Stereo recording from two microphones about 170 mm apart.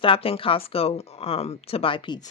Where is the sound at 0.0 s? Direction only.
30° left (ahead or behind).